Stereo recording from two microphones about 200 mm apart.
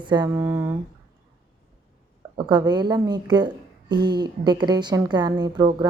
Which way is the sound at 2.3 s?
20° right (ahead or behind).